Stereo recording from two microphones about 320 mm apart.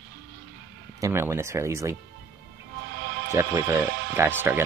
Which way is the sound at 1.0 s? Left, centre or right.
Centre.